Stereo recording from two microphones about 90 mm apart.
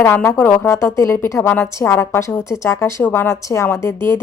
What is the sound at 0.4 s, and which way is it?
A woman's voice, 30° left (ahead or behind).